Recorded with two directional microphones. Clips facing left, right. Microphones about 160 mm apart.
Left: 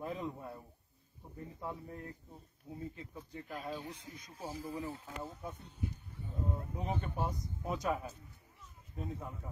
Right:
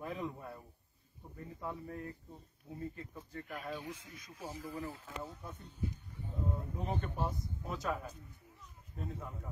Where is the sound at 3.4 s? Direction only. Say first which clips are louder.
Left 1 dB; 30° left (ahead or behind).